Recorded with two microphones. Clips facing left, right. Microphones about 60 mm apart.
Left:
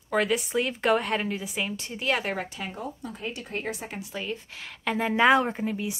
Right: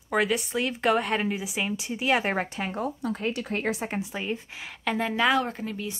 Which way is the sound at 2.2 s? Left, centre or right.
Right.